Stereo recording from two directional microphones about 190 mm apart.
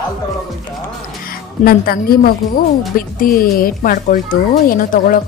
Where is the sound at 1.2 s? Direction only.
50° left (ahead or behind).